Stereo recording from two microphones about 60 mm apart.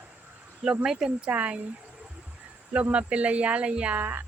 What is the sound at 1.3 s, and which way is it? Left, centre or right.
Speech, right.